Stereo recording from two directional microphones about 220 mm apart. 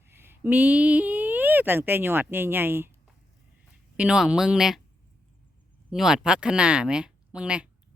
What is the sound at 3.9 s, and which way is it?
Speech, 5° right (ahead or behind).